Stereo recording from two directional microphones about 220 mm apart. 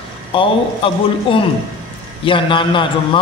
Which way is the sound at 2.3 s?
25° left (ahead or behind).